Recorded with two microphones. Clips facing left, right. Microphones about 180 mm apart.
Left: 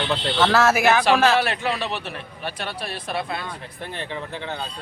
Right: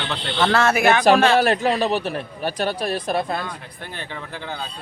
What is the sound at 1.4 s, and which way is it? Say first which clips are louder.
Speech: right 6 dB; 40° right (ahead or behind).